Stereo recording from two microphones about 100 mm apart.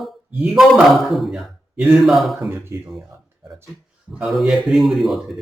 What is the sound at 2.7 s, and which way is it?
Speech, 30° right (ahead or behind).